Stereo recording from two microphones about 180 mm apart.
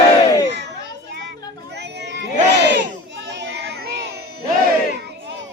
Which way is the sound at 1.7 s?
70° right (ahead or behind).